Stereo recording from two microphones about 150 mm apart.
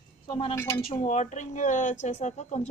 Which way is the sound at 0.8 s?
40° left (ahead or behind).